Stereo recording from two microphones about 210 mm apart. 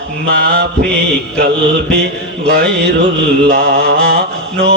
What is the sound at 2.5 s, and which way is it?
Mantra, 50° right (ahead or behind).